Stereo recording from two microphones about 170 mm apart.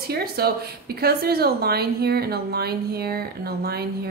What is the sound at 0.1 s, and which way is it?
A woman's voice, 65° right (ahead or behind).